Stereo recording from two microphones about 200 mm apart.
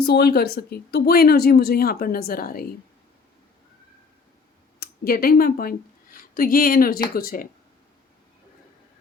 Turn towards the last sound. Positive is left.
turn(degrees=45)  # may be behind; listen again after turning